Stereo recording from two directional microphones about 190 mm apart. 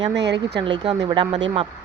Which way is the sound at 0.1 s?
65° right (ahead or behind).